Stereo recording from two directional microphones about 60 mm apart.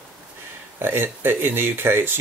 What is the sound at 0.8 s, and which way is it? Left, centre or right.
Speech, right.